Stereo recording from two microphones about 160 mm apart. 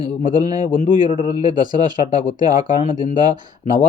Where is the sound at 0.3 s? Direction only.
25° right (ahead or behind).